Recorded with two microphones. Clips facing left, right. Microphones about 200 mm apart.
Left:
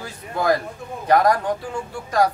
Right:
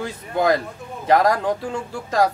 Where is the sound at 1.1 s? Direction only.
25° right (ahead or behind).